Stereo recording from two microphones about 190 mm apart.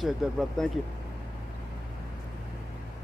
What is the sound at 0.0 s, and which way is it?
Speech, centre (ahead or behind).